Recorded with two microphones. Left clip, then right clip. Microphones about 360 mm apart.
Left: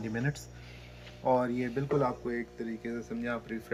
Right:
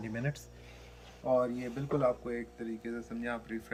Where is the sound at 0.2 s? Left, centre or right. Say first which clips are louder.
Left 2 dB; centre.